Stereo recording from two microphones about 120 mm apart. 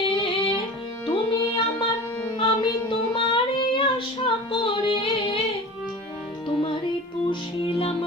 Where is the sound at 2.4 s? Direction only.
40° left (ahead or behind).